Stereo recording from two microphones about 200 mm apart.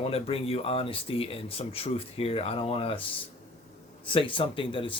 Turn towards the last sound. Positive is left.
turn(degrees=25)  # may be behind; listen again after turning